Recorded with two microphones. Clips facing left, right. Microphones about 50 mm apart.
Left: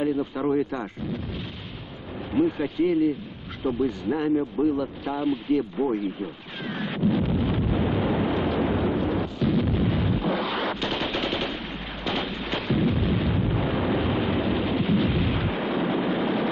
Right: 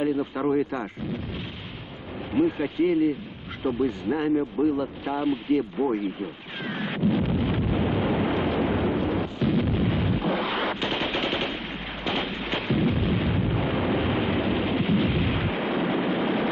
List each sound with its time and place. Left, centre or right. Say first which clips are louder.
0.6 s speech: even; centre
2.3 s speech: even; centre
4.1 s speech: left 1 dB; right
5.8 s speech: even; centre
6.6 s wind noise: even; centre
8.6 s explosion: even; centre
15.8 s vehicle: left 1 dB; centre